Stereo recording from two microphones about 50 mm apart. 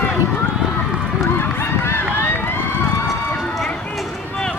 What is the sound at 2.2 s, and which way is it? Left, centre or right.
Run, left.